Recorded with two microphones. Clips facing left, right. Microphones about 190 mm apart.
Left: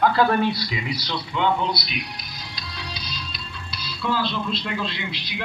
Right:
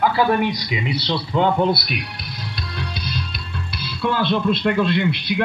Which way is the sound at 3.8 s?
55° right (ahead or behind).